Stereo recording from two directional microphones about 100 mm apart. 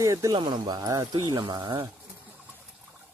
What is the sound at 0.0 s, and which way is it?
Speech, 35° right (ahead or behind).